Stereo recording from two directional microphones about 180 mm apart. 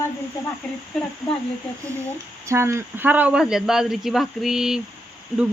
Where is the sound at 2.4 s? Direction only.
15° right (ahead or behind).